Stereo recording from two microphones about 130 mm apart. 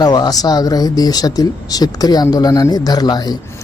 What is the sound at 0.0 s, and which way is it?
Speech, 30° left (ahead or behind).